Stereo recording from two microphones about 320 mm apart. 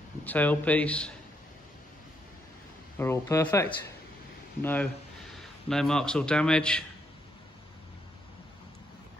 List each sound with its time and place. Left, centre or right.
0.2 s a man's voice: centre
3.0 s a man's voice: centre